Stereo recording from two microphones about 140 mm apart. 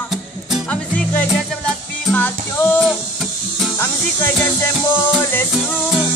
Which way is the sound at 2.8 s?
Centre (ahead or behind).